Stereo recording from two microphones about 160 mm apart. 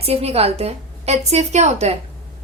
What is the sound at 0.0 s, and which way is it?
A woman's voice, 40° right (ahead or behind).